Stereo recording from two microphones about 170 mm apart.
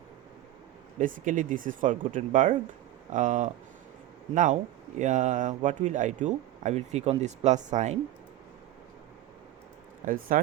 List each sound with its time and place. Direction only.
0.9 s speech: 50° right (ahead or behind)
4.9 s speech: 45° right (ahead or behind)
10.1 s speech: 55° right (ahead or behind)